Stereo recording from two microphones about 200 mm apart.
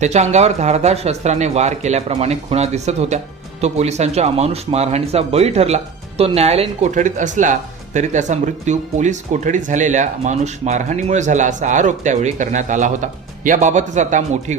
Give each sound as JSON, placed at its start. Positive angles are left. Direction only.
{"t": 0.0, "sound": "speech", "side_deg": -35}